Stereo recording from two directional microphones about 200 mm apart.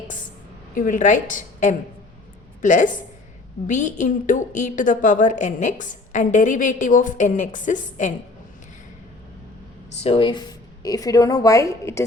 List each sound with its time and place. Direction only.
0.7 s a woman's voice: 40° left (ahead or behind)
10.0 s a woman's voice: 25° left (ahead or behind)